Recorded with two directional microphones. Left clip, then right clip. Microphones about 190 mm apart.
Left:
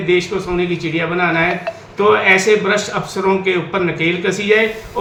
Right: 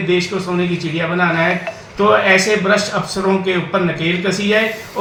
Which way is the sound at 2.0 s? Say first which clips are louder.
Even; 10° left (ahead or behind).